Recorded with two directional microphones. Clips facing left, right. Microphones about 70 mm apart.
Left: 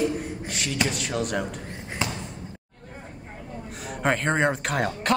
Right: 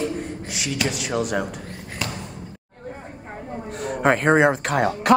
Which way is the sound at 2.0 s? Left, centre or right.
Left.